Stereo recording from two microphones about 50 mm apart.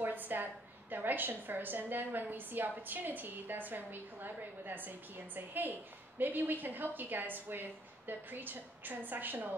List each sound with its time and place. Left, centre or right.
0.0 s a woman's voice: right